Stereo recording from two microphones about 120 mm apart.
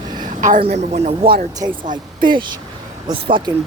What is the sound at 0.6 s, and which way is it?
Speech, 65° right (ahead or behind).